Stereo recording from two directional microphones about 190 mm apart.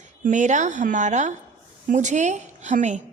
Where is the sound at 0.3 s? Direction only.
40° right (ahead or behind).